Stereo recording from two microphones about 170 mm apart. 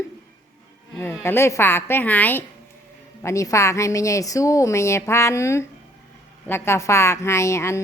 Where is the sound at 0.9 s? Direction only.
10° left (ahead or behind).